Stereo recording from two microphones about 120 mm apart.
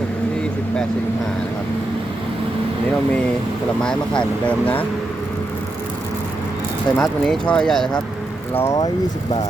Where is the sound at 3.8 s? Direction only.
5° left (ahead or behind).